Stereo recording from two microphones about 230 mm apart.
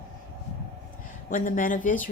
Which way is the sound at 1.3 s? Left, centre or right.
Left.